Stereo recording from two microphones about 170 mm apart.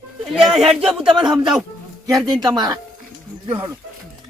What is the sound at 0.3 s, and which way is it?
Speech, centre (ahead or behind).